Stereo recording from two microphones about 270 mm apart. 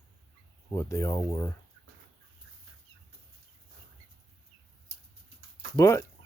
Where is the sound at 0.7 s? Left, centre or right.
Centre.